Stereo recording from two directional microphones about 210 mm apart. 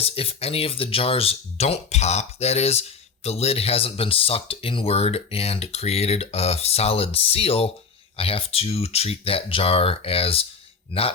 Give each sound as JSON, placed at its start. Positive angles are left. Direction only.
{"t": 0.0, "sound": "speech", "side_deg": 30}